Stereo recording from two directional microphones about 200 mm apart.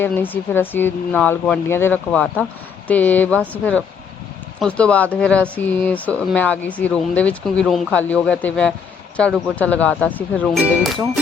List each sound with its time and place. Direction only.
0.0 s speech: 10° left (ahead or behind)